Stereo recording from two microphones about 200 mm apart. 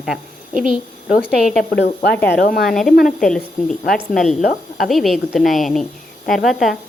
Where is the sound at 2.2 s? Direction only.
55° left (ahead or behind).